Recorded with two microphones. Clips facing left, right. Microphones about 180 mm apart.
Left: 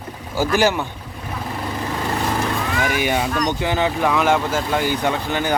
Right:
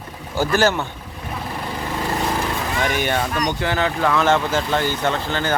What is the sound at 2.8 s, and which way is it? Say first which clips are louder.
Speech: even; 5° left (ahead or behind).